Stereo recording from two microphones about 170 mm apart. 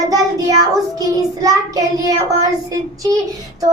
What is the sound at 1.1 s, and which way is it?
Child singing, 20° right (ahead or behind).